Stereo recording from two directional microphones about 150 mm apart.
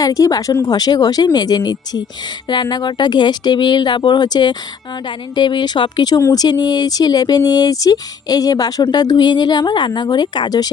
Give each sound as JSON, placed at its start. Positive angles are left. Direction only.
{"t": 0.0, "sound": "speech", "side_deg": 25}